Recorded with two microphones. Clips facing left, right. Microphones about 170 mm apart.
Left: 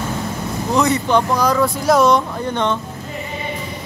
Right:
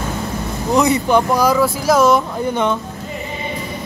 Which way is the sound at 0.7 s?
10° right (ahead or behind).